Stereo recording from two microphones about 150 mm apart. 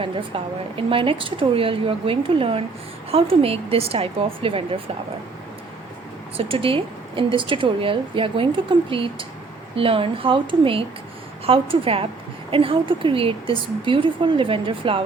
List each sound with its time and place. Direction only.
0.0 s a woman's voice: 35° right (ahead or behind)
6.3 s a woman's voice: 35° right (ahead or behind)